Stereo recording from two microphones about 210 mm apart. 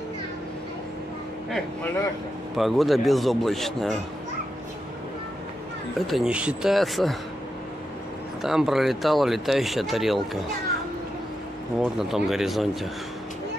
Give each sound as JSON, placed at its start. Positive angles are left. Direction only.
{"t": 2.5, "sound": "speech", "side_deg": 0}
{"t": 5.9, "sound": "speech", "side_deg": 0}
{"t": 8.4, "sound": "speech", "side_deg": 0}
{"t": 11.8, "sound": "speech", "side_deg": 0}